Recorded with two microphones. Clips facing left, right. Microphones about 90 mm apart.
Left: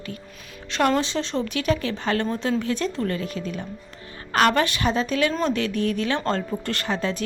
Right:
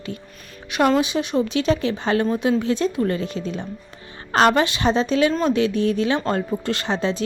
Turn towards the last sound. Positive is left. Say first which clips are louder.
# right 3 dB
turn(degrees=-20)  # may be behind; listen again after turning